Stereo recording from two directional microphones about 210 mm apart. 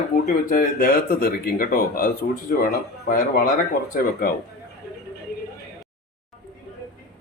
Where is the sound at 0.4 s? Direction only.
40° left (ahead or behind).